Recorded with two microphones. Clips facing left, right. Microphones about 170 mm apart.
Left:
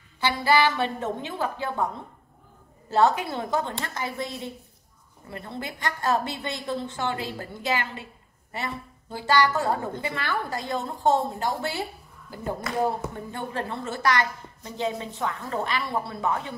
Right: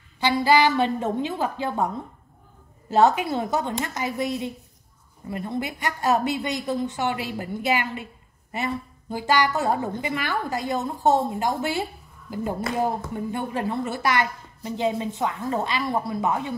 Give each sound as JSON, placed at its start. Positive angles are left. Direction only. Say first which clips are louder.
{"t": 0.2, "sound": "a woman's voice", "louder": "right 3 dB", "side_deg": -20}
{"t": 2.9, "sound": "a woman's voice", "louder": "right 3 dB", "side_deg": -20}